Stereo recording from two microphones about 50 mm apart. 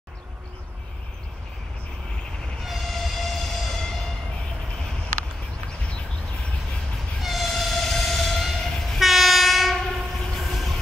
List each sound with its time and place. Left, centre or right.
2.6 s train: centre
7.2 s train: centre